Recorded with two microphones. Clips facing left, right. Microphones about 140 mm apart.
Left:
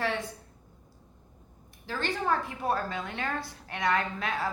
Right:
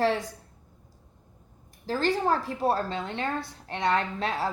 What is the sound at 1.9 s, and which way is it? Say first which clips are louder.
Speech: right 5 dB; 35° right (ahead or behind).